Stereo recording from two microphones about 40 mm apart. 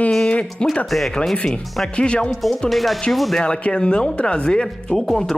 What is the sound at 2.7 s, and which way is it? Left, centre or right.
Speech, centre.